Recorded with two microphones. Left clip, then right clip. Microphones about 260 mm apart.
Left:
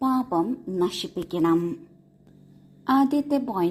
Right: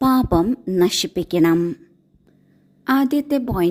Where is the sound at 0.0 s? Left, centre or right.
Right.